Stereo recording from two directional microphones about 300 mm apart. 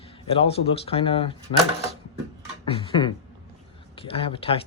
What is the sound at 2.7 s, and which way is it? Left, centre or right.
Speech, centre.